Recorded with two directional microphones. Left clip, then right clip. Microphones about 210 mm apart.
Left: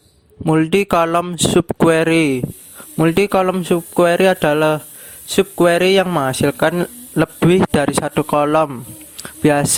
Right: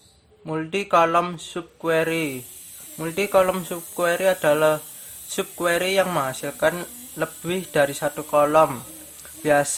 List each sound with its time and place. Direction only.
0.4 s speech: 50° left (ahead or behind)